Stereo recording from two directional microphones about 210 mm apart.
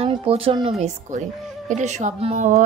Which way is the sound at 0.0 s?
25° right (ahead or behind).